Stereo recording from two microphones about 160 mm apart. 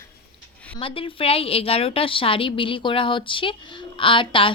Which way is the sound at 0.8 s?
35° left (ahead or behind).